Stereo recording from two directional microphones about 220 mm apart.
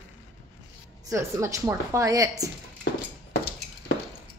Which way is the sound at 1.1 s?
15° right (ahead or behind).